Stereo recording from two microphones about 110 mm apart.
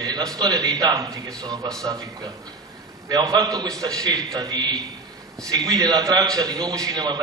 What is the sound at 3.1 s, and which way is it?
A man's voice, 35° right (ahead or behind).